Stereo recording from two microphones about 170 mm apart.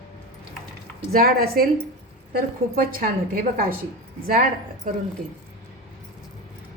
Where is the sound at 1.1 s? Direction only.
60° right (ahead or behind).